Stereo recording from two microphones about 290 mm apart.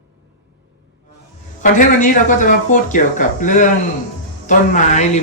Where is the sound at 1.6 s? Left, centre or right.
Left.